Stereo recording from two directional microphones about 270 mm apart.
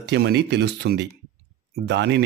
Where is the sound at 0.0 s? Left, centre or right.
Right.